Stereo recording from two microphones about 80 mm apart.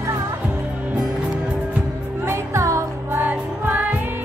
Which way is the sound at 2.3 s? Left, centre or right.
Right.